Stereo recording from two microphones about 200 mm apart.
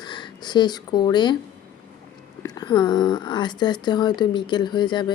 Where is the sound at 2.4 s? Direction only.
20° left (ahead or behind).